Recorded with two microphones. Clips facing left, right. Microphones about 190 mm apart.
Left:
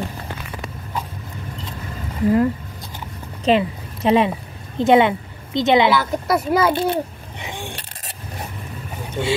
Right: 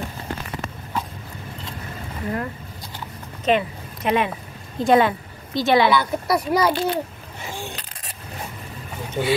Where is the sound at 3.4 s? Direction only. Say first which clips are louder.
Left 3 dB; 30° left (ahead or behind).